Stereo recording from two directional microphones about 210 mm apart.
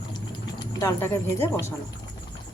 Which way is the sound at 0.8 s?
15° left (ahead or behind).